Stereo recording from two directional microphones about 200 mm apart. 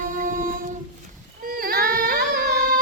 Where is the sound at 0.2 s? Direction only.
45° right (ahead or behind).